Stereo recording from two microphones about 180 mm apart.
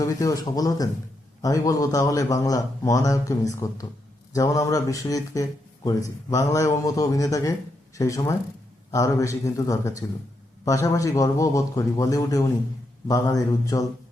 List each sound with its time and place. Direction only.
0.0 s a man's voice: 20° left (ahead or behind)